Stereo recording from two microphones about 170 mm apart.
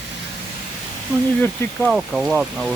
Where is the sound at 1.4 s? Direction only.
10° left (ahead or behind).